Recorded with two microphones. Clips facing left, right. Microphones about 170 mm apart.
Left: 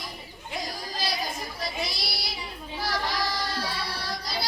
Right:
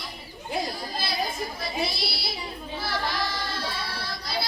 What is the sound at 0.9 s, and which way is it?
Chatter, 40° left (ahead or behind).